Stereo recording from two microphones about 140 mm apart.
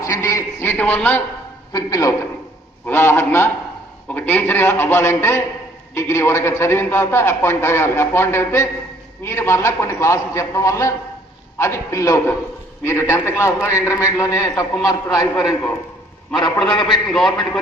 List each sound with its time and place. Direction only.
0.0 s a sound: 25° left (ahead or behind)
1.7 s a man's voice: 25° left (ahead or behind)
2.8 s a man's voice: 15° left (ahead or behind)
16.8 s a man's voice: 5° left (ahead or behind)